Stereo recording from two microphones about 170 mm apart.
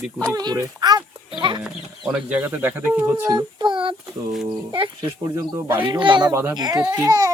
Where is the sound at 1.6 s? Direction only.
5° right (ahead or behind).